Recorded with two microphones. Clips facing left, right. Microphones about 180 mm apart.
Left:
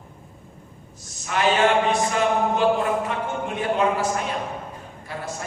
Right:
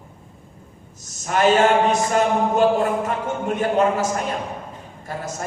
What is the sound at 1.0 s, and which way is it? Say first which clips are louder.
A man's voice: right 4 dB; 45° right (ahead or behind).